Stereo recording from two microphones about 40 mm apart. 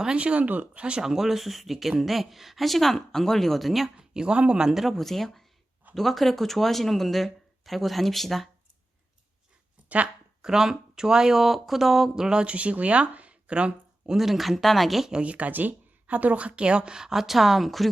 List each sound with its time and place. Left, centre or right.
0.2 s a woman's voice: right
0.4 s speech: right
0.8 s speech: right
1.0 s speech: centre
3.9 s speech: right
4.7 s speech: centre
10.4 s speech: centre; by 13.7 s right
14.2 s speech: centre
15.2 s a woman's voice: right
16.7 s speech: centre